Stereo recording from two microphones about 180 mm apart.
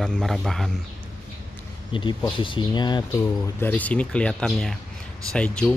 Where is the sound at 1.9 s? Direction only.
30° left (ahead or behind).